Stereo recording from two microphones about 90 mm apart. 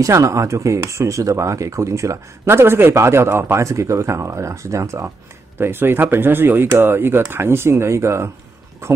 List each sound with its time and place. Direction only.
0.0 s speech: 35° right (ahead or behind)